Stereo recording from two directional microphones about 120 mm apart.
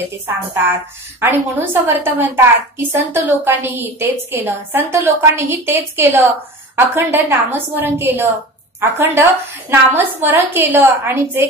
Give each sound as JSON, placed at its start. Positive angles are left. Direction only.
{"t": 1.2, "sound": "a woman's voice", "side_deg": -15}